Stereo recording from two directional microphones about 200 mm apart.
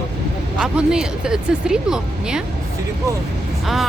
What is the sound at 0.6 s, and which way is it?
Speech, 5° right (ahead or behind).